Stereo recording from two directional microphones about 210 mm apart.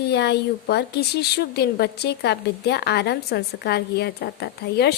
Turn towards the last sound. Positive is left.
turn(degrees=50)  # may be behind; listen again after turning